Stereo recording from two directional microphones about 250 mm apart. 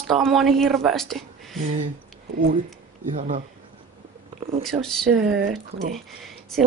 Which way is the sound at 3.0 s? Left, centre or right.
Right.